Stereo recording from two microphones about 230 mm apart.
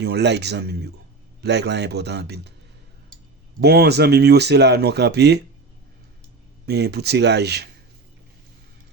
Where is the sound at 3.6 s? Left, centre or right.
Right.